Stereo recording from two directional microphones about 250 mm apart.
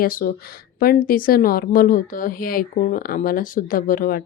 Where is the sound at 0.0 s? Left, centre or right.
Left.